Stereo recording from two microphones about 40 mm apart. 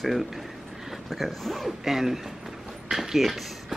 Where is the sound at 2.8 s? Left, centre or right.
Centre.